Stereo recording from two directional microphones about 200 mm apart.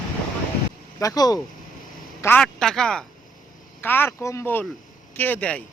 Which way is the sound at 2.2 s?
5° left (ahead or behind).